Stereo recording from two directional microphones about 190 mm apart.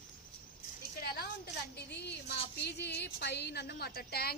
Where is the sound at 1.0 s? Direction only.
55° left (ahead or behind).